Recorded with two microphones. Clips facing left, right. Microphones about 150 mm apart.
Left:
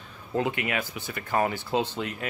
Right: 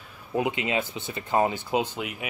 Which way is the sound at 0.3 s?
15° right (ahead or behind).